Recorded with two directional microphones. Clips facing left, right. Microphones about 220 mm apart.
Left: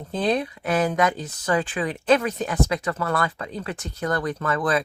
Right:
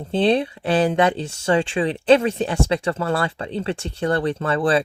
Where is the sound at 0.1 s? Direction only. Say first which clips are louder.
Right 5 dB; 30° right (ahead or behind).